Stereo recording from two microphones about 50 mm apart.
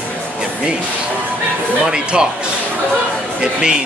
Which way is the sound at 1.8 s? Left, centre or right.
Centre.